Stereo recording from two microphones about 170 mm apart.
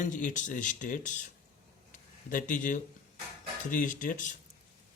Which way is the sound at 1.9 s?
50° left (ahead or behind).